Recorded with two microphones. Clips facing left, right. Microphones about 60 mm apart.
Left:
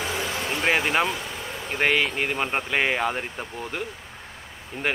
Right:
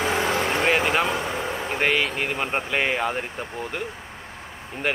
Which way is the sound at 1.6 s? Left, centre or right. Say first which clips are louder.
Left 1 dB; centre.